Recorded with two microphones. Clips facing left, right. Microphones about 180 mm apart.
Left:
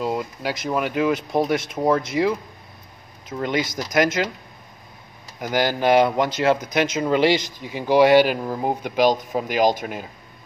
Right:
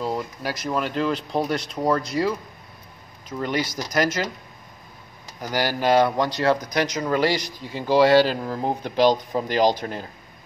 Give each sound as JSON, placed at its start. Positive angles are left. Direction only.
{"t": 0.0, "sound": "speech", "side_deg": 15}
{"t": 5.4, "sound": "speech", "side_deg": 20}